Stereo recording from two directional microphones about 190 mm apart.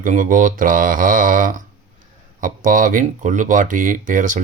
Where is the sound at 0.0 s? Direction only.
45° right (ahead or behind).